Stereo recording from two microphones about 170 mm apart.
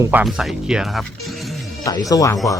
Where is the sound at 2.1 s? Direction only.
20° left (ahead or behind).